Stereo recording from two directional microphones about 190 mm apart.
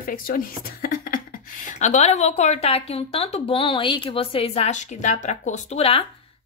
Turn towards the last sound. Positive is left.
turn(degrees=30)  # may be behind; listen again after turning